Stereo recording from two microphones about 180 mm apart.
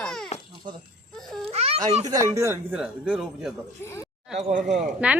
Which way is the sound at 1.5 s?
35° right (ahead or behind).